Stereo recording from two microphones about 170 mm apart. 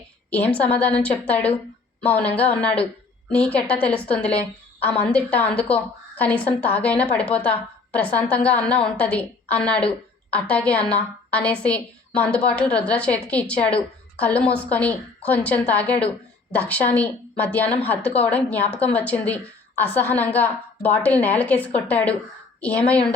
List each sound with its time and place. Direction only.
0.3 s a woman's voice: 10° left (ahead or behind)